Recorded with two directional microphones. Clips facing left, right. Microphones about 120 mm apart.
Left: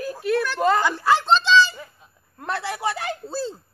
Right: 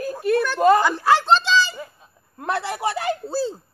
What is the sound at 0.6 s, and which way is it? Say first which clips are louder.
A child's voice: right 6 dB; 15° right (ahead or behind).